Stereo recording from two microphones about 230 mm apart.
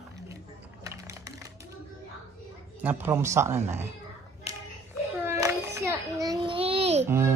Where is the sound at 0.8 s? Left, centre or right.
Centre.